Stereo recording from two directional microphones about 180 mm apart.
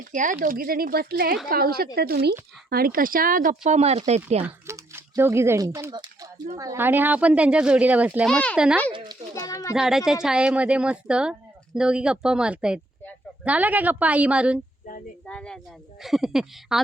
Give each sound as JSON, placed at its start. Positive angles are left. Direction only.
{"t": 0.1, "sound": "a woman's voice", "side_deg": -45}
{"t": 4.4, "sound": "speech", "side_deg": -15}
{"t": 8.3, "sound": "speech", "side_deg": 5}
{"t": 8.5, "sound": "speech", "side_deg": -5}
{"t": 9.3, "sound": "a child's voice", "side_deg": 20}
{"t": 9.7, "sound": "speech", "side_deg": 0}
{"t": 15.3, "sound": "speech", "side_deg": 5}